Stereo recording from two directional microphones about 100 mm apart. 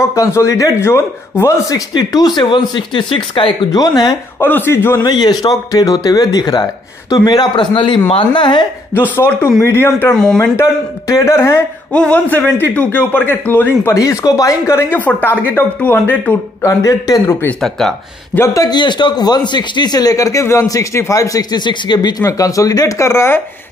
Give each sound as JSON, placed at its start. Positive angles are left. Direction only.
{"t": 0.0, "sound": "speech", "side_deg": 30}
{"t": 2.0, "sound": "a man's voice", "side_deg": 45}
{"t": 4.4, "sound": "speech", "side_deg": 20}
{"t": 5.0, "sound": "a man's voice", "side_deg": 45}
{"t": 8.9, "sound": "speech", "side_deg": 20}
{"t": 10.1, "sound": "speech", "side_deg": 5}
{"t": 10.5, "sound": "speech", "side_deg": 30}
{"t": 11.9, "sound": "speech", "side_deg": 10}
{"t": 13.9, "sound": "speech", "side_deg": 35}
{"t": 16.6, "sound": "speech", "side_deg": 30}
{"t": 17.6, "sound": "speech", "side_deg": 5}
{"t": 18.5, "sound": "speech", "side_deg": 35}
{"t": 18.8, "sound": "a man's voice", "side_deg": 50}
{"t": 22.2, "sound": "speech", "side_deg": 35}